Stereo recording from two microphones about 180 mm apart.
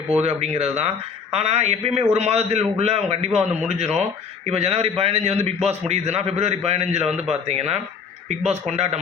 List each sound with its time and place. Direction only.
0.1 s a man's voice: 35° right (ahead or behind)